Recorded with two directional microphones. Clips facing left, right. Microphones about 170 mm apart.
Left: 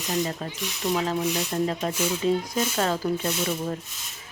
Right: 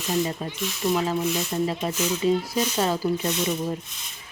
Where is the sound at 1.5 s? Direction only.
5° right (ahead or behind).